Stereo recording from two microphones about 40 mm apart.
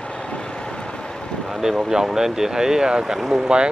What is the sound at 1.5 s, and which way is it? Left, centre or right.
Speech, centre.